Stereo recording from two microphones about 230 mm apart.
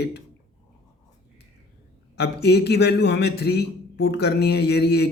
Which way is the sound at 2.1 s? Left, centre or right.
Left.